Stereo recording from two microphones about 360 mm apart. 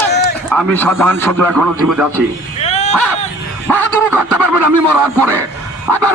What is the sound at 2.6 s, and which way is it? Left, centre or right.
Dog, centre.